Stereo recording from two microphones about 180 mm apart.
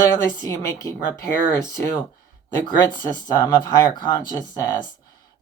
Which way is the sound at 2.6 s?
25° left (ahead or behind).